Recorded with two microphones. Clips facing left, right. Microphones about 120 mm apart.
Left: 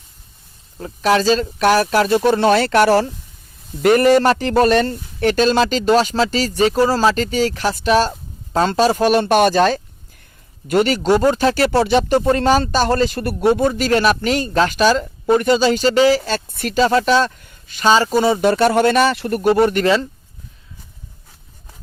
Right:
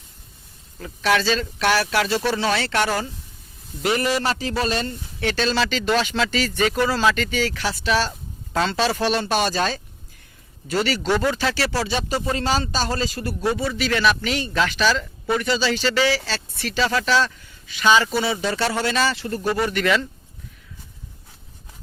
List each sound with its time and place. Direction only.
0.8 s speech: 35° left (ahead or behind)
2.2 s speech: 50° left (ahead or behind)
3.8 s speech: 50° left (ahead or behind)
11.7 s speech: 55° left (ahead or behind)
19.8 s speech: 35° left (ahead or behind)